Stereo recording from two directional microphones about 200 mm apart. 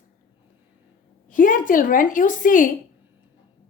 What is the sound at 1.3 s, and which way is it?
A woman's voice, 40° left (ahead or behind).